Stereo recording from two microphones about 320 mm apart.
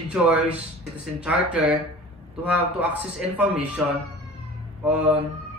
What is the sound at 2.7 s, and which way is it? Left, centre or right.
Speech, centre.